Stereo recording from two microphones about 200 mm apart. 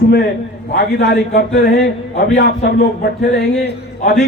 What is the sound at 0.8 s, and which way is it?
A man's voice, 55° left (ahead or behind).